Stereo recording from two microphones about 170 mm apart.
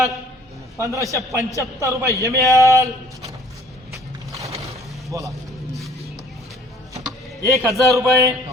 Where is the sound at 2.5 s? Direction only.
15° right (ahead or behind).